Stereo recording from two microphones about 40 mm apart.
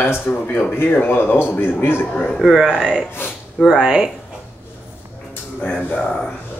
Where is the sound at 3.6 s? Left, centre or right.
Centre.